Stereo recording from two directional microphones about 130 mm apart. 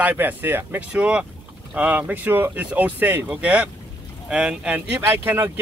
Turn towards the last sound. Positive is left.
turn(degrees=-20)  # may be behind; listen again after turning